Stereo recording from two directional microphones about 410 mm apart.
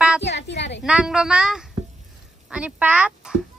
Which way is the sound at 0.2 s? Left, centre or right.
Left.